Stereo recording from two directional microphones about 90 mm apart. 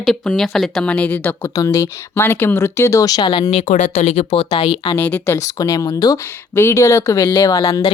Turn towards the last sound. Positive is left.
turn(degrees=40)  # may be behind; listen again after turning